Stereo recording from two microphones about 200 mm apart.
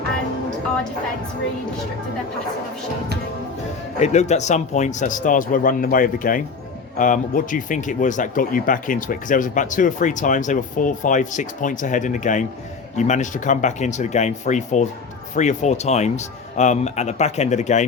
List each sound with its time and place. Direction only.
4.0 s speech: 35° left (ahead or behind)